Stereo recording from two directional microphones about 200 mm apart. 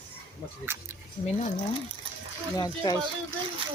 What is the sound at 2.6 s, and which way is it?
Speech, 20° left (ahead or behind).